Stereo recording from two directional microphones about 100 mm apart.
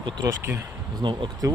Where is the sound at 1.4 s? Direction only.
35° right (ahead or behind).